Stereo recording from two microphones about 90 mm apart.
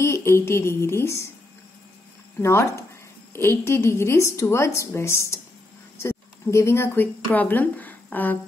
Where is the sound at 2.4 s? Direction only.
30° left (ahead or behind).